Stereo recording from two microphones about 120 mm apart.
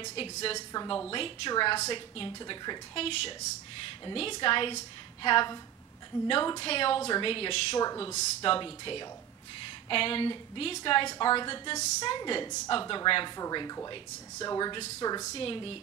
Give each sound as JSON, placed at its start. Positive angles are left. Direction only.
{"t": 0.1, "sound": "a woman's voice", "side_deg": 50}
{"t": 0.7, "sound": "a woman's voice", "side_deg": 40}
{"t": 3.0, "sound": "a woman's voice", "side_deg": 55}
{"t": 15.3, "sound": "a woman's voice", "side_deg": 50}